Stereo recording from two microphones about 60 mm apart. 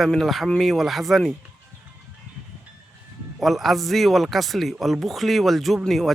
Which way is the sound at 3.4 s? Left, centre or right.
Centre.